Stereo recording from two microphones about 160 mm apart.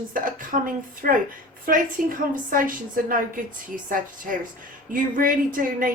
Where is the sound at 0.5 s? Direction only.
55° right (ahead or behind).